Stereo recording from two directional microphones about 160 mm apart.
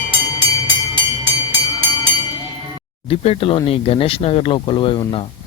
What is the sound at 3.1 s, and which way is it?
Speech, 35° left (ahead or behind).